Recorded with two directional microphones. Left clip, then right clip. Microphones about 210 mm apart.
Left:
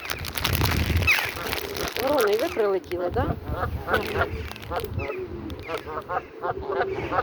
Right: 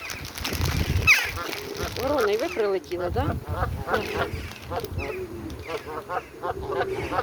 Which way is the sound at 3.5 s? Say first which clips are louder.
Left 1 dB; 15° left (ahead or behind).